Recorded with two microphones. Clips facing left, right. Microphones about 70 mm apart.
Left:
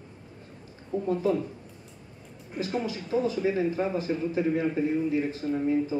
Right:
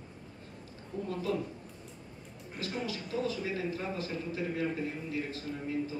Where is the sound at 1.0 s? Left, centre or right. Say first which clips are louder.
Left 7 dB; left.